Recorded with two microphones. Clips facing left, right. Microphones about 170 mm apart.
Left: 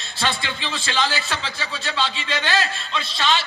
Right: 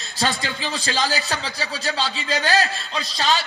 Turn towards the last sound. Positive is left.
turn(degrees=-40)  # may be behind; listen again after turning